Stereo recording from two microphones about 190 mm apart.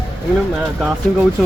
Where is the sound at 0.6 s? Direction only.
5° right (ahead or behind).